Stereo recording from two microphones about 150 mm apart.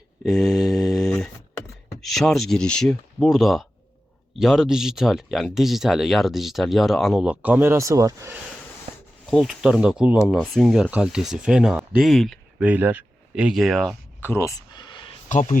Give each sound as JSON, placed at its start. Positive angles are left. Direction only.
{"t": 0.2, "sound": "mantra", "side_deg": 0}
{"t": 2.0, "sound": "speech", "side_deg": 0}
{"t": 9.3, "sound": "speech", "side_deg": 0}
{"t": 14.2, "sound": "a sound", "side_deg": 15}
{"t": 15.3, "sound": "speech", "side_deg": 55}